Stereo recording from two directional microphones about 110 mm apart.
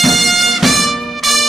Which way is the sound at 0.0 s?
Centre (ahead or behind).